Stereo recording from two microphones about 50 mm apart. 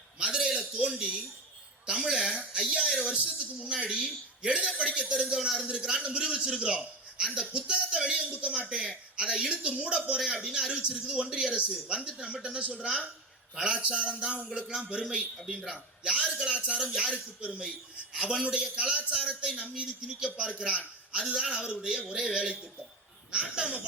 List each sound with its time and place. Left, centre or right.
0.2 s a sound: centre
1.9 s a man's voice: centre
15.4 s a man's voice: centre